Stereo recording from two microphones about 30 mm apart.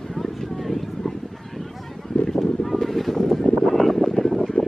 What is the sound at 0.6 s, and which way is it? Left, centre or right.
Vehicle, centre.